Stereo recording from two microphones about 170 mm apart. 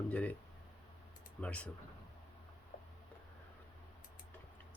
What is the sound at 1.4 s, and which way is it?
Speech, 5° left (ahead or behind).